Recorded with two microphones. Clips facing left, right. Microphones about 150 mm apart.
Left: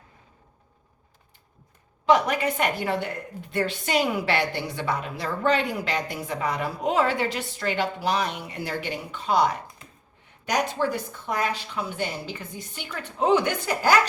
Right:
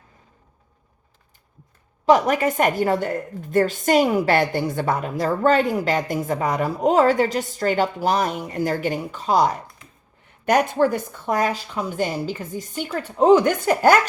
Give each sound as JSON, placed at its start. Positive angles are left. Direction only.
{"t": 2.0, "sound": "a woman's voice", "side_deg": -40}
{"t": 10.4, "sound": "a woman's voice", "side_deg": -55}